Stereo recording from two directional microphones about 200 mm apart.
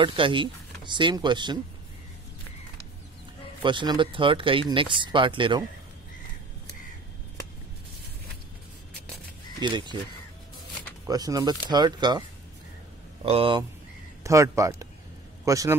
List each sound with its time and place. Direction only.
0.0 s speech: 25° right (ahead or behind)
3.6 s speech: 25° right (ahead or behind)
9.6 s speech: 20° right (ahead or behind)
11.1 s speech: 20° right (ahead or behind)
14.2 s a man's voice: 15° right (ahead or behind)